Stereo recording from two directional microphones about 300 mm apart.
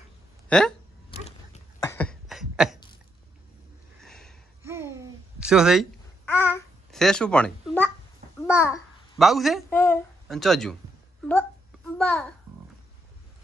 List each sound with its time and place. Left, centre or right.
0.5 s speech: centre
1.1 s a sound: left
1.8 s cough: centre
4.0 s sniff: centre
4.6 s babbling: centre
8.5 s a child's voice: centre
12.0 s speech: centre